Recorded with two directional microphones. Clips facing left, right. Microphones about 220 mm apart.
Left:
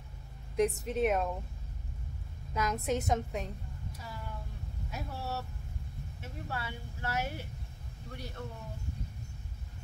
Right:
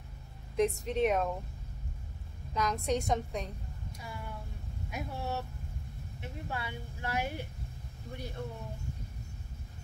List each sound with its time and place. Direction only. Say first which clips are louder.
0.6 s a woman's voice: even; centre (ahead or behind)
2.5 s a woman's voice: right 1 dB; 5° left (ahead or behind)
4.9 s speech: right 2 dB; 15° right (ahead or behind)
6.5 s speech: even; 15° right (ahead or behind)